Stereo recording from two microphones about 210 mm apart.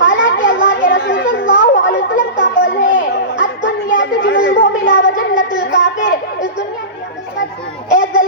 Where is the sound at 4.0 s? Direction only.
60° left (ahead or behind).